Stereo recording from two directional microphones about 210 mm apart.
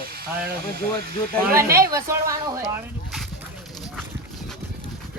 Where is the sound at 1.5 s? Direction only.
15° right (ahead or behind).